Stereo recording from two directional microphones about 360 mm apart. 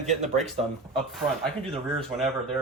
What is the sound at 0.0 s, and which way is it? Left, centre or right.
Speech, centre.